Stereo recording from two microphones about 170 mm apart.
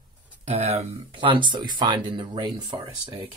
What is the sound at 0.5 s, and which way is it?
Speech, 40° right (ahead or behind).